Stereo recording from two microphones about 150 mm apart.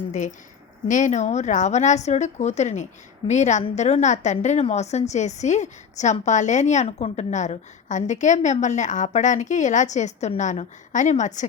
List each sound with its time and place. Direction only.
0.9 s a woman's voice: 55° left (ahead or behind)